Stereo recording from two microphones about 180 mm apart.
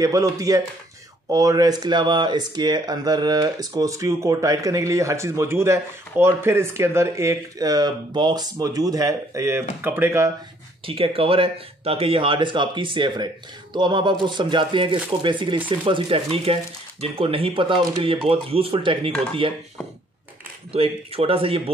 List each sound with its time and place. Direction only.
0.0 s speech: 20° right (ahead or behind)
10.9 s speech: 30° right (ahead or behind)
20.7 s speech: 30° right (ahead or behind)